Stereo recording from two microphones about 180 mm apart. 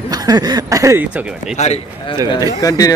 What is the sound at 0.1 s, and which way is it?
Speech, 20° right (ahead or behind).